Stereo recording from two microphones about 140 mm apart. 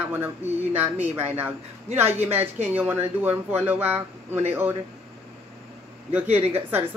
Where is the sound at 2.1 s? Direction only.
50° right (ahead or behind).